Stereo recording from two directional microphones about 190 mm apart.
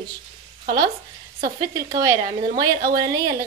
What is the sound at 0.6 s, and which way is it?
Speech, 55° right (ahead or behind).